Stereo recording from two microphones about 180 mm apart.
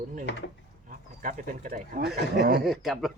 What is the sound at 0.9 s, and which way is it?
Speech, 45° right (ahead or behind).